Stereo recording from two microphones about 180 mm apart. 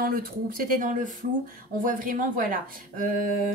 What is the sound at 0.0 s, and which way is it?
A woman's voice, 55° right (ahead or behind).